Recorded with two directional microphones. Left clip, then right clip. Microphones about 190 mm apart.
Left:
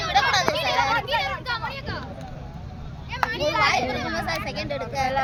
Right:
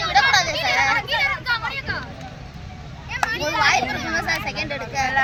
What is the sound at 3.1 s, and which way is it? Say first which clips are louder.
Children playing: right 1 dB; 15° left (ahead or behind).